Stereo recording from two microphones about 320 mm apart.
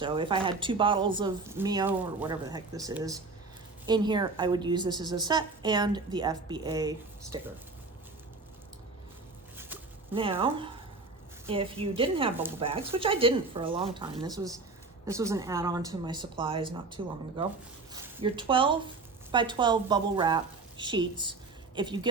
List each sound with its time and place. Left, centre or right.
0.0 s a woman's voice: centre
9.6 s a sound: centre
11.4 s a woman's voice: centre